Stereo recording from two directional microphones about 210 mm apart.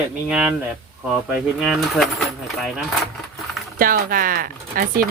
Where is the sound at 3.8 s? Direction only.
40° right (ahead or behind).